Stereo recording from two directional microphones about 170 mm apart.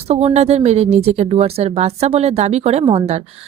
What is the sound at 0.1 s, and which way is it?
Speech, 40° right (ahead or behind).